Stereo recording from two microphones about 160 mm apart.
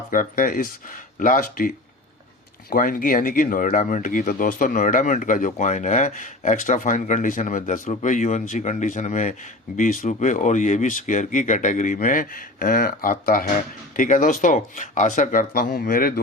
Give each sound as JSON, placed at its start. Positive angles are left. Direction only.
{"t": 0.1, "sound": "speech", "side_deg": 60}